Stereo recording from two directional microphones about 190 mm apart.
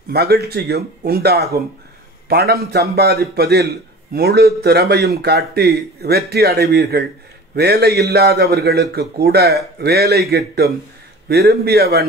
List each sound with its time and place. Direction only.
0.1 s a man's voice: 55° right (ahead or behind)